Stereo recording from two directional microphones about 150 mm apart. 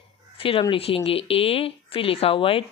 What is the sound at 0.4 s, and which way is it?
Speech, 35° left (ahead or behind).